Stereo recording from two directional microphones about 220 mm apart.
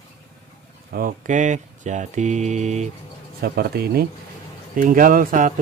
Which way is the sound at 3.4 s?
45° right (ahead or behind).